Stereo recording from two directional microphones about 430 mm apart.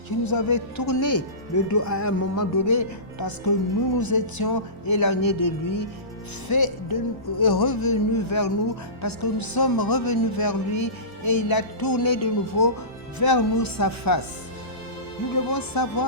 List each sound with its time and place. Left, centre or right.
0.3 s speech: left
1.7 s music: left
3.2 s speech: left
3.9 s music: left
4.9 s speech: left
15.4 s speech: left